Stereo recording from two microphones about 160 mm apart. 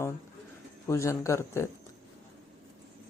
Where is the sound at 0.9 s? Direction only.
20° left (ahead or behind).